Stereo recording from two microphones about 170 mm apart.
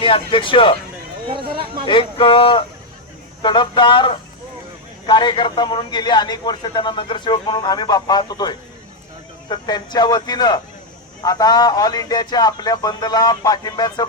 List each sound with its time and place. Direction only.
0.0 s speech: 30° left (ahead or behind)
1.3 s speech: 30° right (ahead or behind)
1.9 s a man's voice: 30° left (ahead or behind)